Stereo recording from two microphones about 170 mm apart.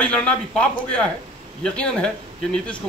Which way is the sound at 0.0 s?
5° left (ahead or behind).